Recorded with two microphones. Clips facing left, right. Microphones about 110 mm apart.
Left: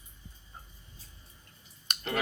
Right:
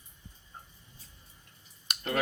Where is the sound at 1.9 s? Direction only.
5° right (ahead or behind).